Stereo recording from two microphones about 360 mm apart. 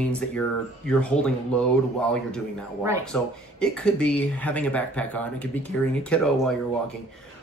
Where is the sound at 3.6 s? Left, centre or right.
Centre.